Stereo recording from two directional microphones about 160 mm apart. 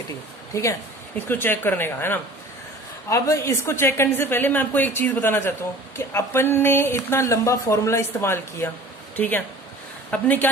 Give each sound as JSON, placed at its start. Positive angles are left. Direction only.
{"t": 0.5, "sound": "speech", "side_deg": 20}